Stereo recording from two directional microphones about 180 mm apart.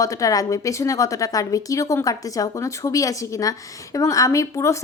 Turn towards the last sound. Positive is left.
turn(degrees=15)  # may be behind; listen again after turning